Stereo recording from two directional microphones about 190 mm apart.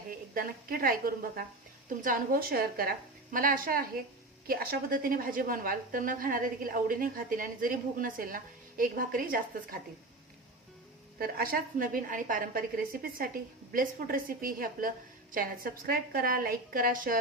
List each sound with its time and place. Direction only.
0.1 s a woman's voice: 50° right (ahead or behind)
11.2 s a woman's voice: 50° right (ahead or behind)